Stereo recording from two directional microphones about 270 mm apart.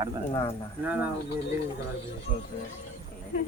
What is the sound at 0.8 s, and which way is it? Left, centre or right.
Speech, centre.